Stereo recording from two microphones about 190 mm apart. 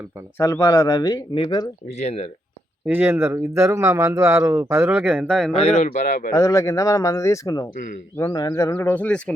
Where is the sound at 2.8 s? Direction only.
10° right (ahead or behind).